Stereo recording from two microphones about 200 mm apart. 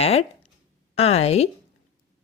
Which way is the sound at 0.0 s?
30° left (ahead or behind).